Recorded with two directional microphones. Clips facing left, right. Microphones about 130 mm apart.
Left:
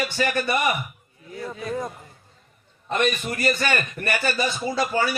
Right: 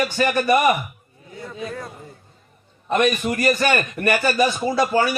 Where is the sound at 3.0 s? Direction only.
50° right (ahead or behind).